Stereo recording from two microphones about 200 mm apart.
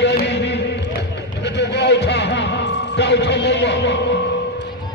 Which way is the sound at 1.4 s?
60° left (ahead or behind).